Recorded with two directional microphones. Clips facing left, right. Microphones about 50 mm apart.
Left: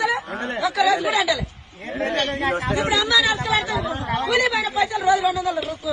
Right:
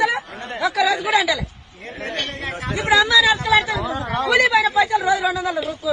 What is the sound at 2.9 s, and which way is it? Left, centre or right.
A man's voice, right.